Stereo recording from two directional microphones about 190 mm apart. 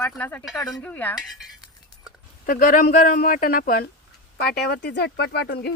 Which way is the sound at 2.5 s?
45° left (ahead or behind).